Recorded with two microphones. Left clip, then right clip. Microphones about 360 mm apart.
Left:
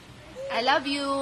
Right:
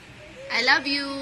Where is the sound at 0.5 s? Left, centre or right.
Centre.